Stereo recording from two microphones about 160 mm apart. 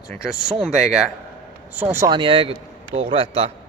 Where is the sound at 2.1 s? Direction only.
30° right (ahead or behind).